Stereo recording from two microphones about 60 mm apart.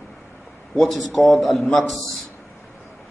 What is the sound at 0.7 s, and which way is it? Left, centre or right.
A man's voice, centre.